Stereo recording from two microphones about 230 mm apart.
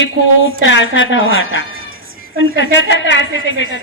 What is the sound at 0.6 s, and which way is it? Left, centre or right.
Speech, left.